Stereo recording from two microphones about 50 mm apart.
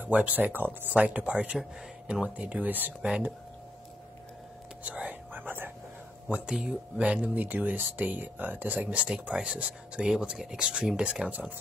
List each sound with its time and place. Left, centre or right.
0.0 s speech: right
0.9 s speech: right
3.0 s speech: right
4.8 s speech: right
6.2 s speech: centre
7.4 s speech: right